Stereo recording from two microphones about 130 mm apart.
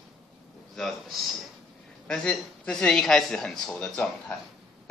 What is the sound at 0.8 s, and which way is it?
A man's voice, centre (ahead or behind).